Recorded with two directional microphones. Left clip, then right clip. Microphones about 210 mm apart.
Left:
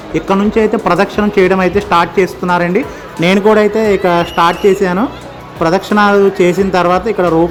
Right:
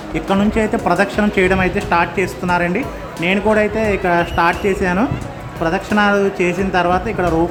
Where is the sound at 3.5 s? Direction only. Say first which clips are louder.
Left 6 dB; 10° left (ahead or behind).